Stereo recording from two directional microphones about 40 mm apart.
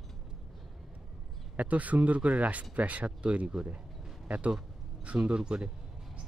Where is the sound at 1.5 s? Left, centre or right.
Right.